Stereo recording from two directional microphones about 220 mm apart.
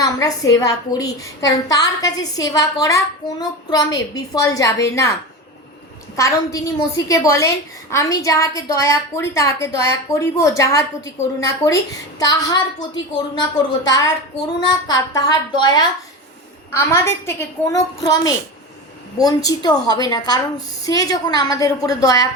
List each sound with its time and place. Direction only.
0.0 s a woman's voice: 15° left (ahead or behind)
6.1 s a woman's voice: 15° left (ahead or behind)